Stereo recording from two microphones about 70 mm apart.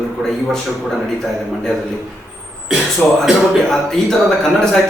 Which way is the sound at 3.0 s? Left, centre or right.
Left.